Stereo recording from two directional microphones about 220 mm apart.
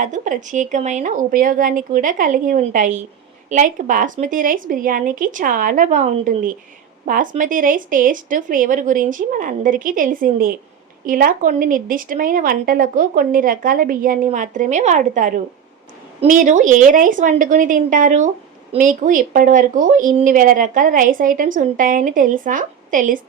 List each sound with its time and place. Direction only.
0.0 s speech: 35° right (ahead or behind)